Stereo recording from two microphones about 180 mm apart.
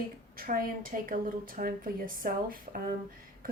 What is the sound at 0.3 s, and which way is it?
Speech, 50° right (ahead or behind).